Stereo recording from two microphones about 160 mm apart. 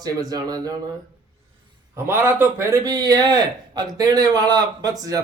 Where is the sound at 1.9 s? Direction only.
15° right (ahead or behind).